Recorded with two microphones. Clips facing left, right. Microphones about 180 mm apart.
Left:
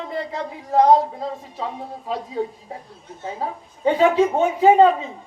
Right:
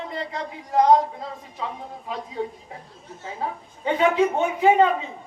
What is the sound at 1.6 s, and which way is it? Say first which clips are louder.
Speech: left 2 dB; 40° left (ahead or behind).